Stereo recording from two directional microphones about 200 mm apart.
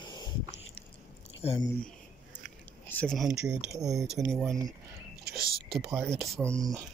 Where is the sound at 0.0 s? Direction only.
20° left (ahead or behind).